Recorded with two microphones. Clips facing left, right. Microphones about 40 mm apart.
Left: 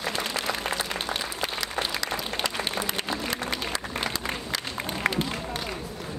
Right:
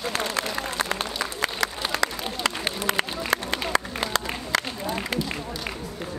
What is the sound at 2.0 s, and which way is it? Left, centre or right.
Applause, right.